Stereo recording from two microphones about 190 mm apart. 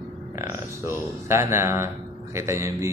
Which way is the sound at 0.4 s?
15° right (ahead or behind).